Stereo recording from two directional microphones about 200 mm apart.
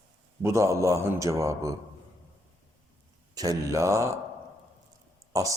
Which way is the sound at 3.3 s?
15° right (ahead or behind).